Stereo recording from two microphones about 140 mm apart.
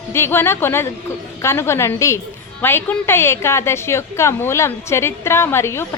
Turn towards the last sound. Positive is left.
turn(degrees=20)  # may be behind; listen again after turning